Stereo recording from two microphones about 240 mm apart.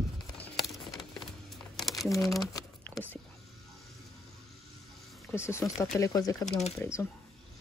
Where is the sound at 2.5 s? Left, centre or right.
Centre.